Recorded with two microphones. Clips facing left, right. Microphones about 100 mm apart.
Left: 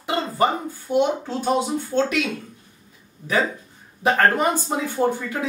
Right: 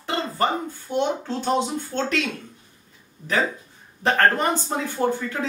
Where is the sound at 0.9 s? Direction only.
10° left (ahead or behind).